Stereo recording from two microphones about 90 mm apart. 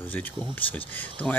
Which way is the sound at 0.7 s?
15° left (ahead or behind).